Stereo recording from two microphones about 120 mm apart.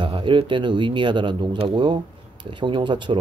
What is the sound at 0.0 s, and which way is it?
Speech, 45° right (ahead or behind).